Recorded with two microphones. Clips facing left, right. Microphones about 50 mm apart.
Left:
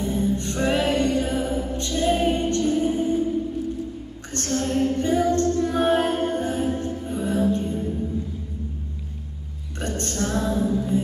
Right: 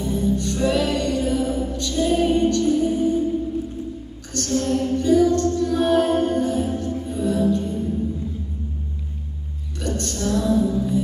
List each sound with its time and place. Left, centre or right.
0.0 s music: left
4.3 s music: left
9.8 s music: left